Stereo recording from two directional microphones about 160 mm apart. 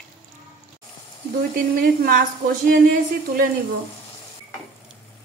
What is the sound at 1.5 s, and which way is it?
A woman's voice, 70° right (ahead or behind).